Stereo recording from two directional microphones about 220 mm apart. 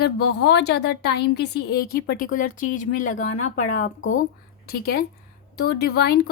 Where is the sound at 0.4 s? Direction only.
50° left (ahead or behind).